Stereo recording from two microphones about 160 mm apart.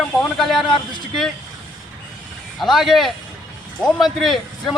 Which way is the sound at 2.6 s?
Centre (ahead or behind).